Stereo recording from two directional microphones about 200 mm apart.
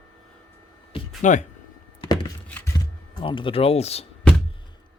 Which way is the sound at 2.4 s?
10° left (ahead or behind).